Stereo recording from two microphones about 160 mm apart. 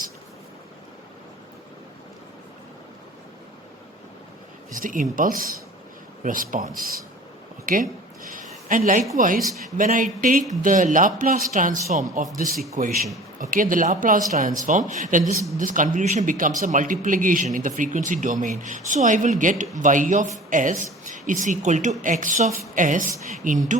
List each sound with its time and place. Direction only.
4.7 s speech: 60° right (ahead or behind)
8.3 s a sound: 55° right (ahead or behind)
9.1 s speech: 60° right (ahead or behind)